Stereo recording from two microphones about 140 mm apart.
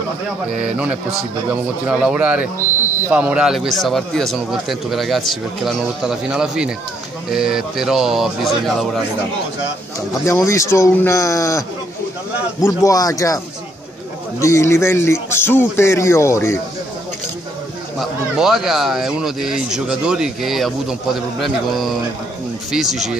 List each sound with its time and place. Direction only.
0.5 s speech: 5° right (ahead or behind)
10.2 s a man's voice: 20° left (ahead or behind)
12.6 s a man's voice: 25° left (ahead or behind)
14.4 s a man's voice: 20° left (ahead or behind)
17.9 s speech: 5° right (ahead or behind)